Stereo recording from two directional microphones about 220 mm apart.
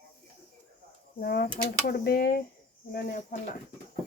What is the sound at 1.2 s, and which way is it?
Speech, 45° left (ahead or behind).